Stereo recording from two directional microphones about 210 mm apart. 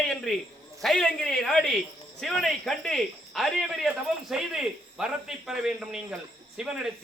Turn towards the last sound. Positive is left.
turn(degrees=-5)  # may be behind; listen again after turning